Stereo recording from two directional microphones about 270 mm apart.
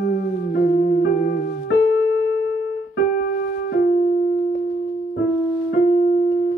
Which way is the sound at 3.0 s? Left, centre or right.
Left.